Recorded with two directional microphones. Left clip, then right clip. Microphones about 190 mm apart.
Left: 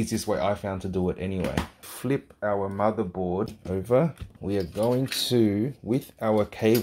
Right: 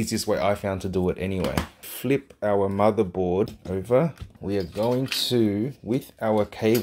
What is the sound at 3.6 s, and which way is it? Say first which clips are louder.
Speech: left 1 dB; centre (ahead or behind).